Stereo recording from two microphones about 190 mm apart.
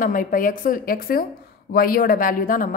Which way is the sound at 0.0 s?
45° left (ahead or behind).